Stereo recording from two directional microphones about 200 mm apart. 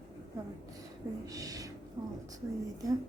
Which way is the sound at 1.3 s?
15° right (ahead or behind).